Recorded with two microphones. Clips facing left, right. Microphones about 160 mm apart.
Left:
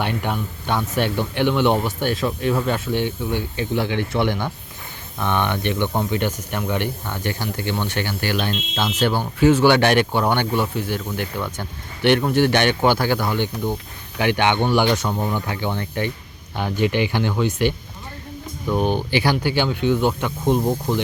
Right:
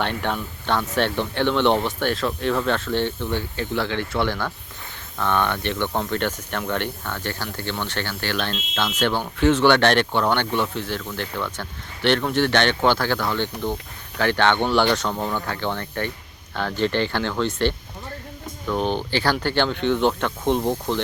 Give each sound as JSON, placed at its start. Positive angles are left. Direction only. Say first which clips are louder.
{"t": 0.0, "sound": "speech", "louder": "left 1 dB", "side_deg": 10}